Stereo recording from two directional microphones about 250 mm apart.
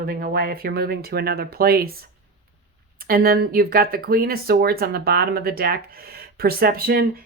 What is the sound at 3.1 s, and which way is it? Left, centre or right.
Speech, right.